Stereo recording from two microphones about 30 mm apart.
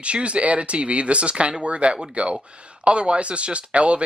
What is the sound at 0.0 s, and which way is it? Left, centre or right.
Speech, right.